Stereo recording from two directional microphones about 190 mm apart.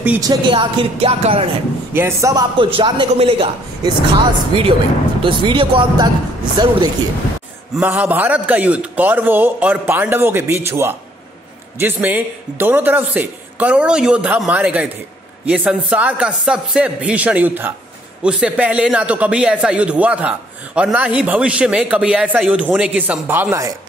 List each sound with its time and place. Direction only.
0.2 s a man's voice: 25° right (ahead or behind)
2.0 s a man's voice: 15° right (ahead or behind)
7.7 s speech: 10° right (ahead or behind)